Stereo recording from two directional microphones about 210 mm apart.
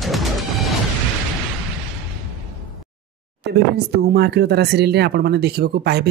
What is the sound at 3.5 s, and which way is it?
Speech, 50° right (ahead or behind).